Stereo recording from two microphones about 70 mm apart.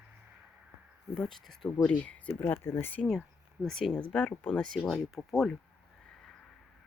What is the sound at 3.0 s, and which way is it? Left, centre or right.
Speech, centre.